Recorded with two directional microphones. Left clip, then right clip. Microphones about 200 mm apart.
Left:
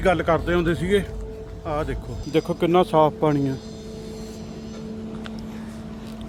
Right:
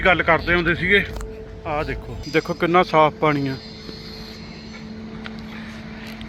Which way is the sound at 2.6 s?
25° left (ahead or behind).